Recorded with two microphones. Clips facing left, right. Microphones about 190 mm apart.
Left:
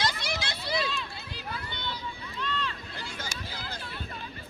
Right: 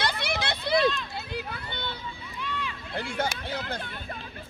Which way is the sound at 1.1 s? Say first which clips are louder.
Right 5 dB; 60° right (ahead or behind).